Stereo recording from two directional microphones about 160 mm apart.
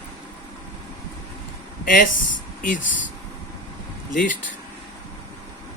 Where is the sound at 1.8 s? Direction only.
55° left (ahead or behind).